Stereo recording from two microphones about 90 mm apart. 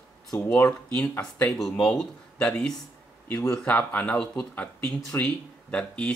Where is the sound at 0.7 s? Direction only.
15° left (ahead or behind).